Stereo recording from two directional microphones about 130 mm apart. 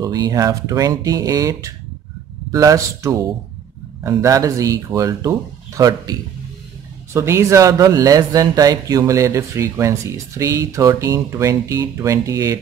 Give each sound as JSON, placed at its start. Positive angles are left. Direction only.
{"t": 0.0, "sound": "speech", "side_deg": -30}
{"t": 7.2, "sound": "speech", "side_deg": -20}